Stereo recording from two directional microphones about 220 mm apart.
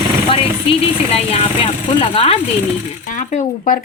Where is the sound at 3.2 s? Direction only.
35° left (ahead or behind).